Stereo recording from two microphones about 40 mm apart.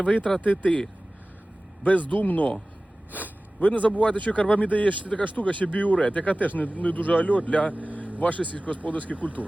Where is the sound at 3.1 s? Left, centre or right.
Left.